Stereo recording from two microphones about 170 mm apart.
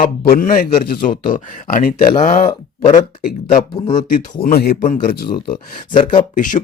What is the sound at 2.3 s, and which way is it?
Speech, 40° left (ahead or behind).